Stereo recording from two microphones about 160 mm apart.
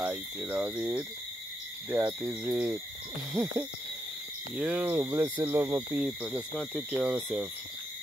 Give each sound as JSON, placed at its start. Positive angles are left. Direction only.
{"t": 0.0, "sound": "speech", "side_deg": -5}
{"t": 3.4, "sound": "speech", "side_deg": -15}
{"t": 4.6, "sound": "speech", "side_deg": -10}
{"t": 6.0, "sound": "speech", "side_deg": 0}